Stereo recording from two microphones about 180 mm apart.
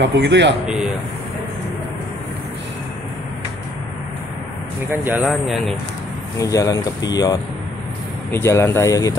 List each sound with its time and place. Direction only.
0.0 s speech: 75° right (ahead or behind)
0.7 s speech: 5° right (ahead or behind)
5.0 s speech: 10° right (ahead or behind)
6.3 s speech: 20° left (ahead or behind)